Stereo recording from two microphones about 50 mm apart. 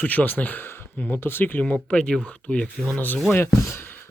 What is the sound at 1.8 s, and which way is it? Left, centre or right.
Speech, centre.